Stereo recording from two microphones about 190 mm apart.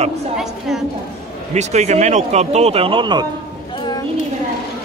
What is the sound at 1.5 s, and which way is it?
Speech, 35° right (ahead or behind).